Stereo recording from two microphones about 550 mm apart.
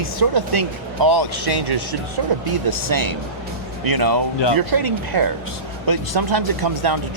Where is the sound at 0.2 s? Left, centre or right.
Right.